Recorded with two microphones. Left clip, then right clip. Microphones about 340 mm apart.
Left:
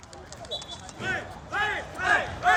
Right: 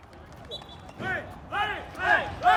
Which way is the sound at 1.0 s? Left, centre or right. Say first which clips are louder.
Left 1 dB; right.